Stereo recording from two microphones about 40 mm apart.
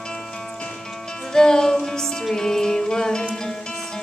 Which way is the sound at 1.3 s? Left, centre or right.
Centre.